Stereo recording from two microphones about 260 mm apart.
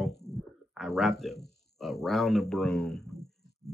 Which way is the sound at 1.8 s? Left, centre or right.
Centre.